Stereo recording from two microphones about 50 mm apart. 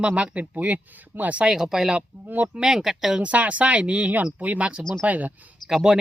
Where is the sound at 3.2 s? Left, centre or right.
Right.